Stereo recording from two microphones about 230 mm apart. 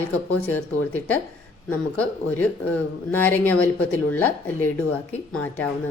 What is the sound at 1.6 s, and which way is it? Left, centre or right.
Speech, centre.